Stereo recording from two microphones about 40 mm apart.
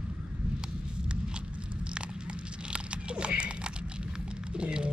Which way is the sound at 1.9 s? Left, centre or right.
Right.